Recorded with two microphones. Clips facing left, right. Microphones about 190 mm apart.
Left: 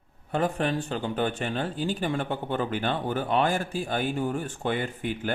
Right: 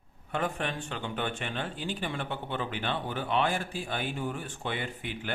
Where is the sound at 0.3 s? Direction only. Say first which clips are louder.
Left 6 dB; 35° left (ahead or behind).